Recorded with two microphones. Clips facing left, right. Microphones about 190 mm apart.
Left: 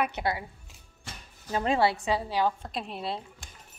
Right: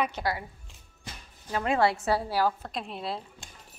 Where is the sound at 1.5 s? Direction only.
25° left (ahead or behind).